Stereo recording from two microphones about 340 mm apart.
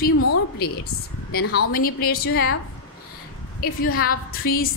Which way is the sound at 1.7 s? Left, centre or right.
Left.